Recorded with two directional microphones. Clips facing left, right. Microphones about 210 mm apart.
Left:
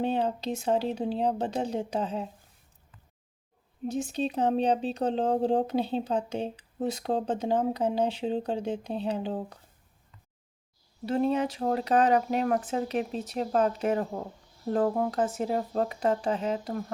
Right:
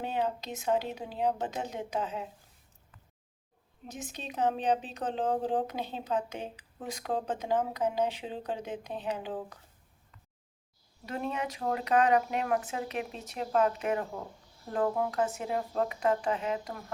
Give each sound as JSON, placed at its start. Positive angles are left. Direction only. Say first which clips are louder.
{"t": 0.0, "sound": "speech", "louder": "left 5 dB", "side_deg": 30}
{"t": 3.8, "sound": "speech", "louder": "left 12 dB", "side_deg": 30}
{"t": 11.0, "sound": "speech", "louder": "left 9 dB", "side_deg": 30}